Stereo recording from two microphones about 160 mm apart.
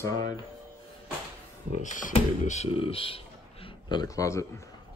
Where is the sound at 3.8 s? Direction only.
25° left (ahead or behind).